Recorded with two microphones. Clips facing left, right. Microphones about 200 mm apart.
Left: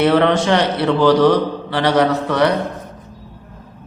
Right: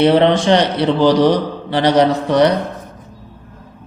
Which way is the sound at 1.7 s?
20° right (ahead or behind).